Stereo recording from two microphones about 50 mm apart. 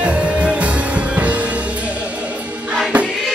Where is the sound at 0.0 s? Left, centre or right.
Right.